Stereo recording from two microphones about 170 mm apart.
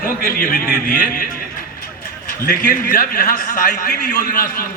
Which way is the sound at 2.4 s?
55° left (ahead or behind).